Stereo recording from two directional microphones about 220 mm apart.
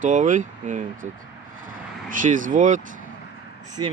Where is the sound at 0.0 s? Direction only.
35° right (ahead or behind).